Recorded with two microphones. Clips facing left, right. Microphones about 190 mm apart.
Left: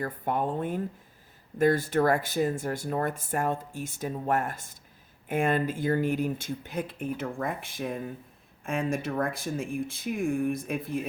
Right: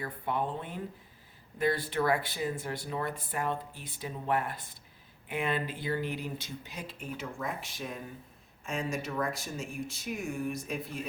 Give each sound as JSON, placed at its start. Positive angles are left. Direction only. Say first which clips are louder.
{"t": 0.0, "sound": "speech", "louder": "left 4 dB", "side_deg": 45}